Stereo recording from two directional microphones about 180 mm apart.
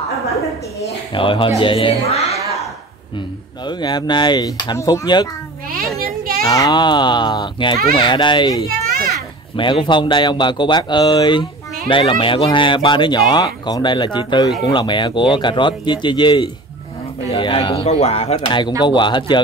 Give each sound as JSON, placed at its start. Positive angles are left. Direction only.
{"t": 0.7, "sound": "speech", "side_deg": 30}
{"t": 3.6, "sound": "speech", "side_deg": 25}
{"t": 6.0, "sound": "children playing", "side_deg": -55}
{"t": 6.4, "sound": "speech", "side_deg": 20}